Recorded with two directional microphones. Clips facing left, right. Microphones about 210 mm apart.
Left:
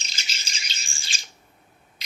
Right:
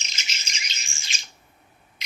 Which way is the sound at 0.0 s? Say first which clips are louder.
Even; 35° left (ahead or behind).